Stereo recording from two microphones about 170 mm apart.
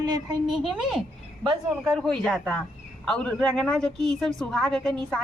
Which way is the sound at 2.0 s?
Centre (ahead or behind).